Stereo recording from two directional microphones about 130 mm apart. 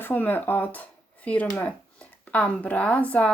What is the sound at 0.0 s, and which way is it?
Speech, 15° left (ahead or behind).